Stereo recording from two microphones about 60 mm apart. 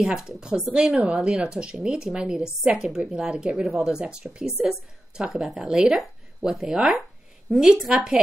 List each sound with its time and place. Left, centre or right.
0.0 s a woman's voice: centre
3.6 s a woman's voice: centre
5.9 s a woman's voice: centre